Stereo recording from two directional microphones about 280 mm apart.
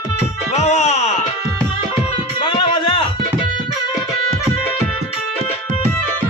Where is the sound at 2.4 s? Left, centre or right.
Centre.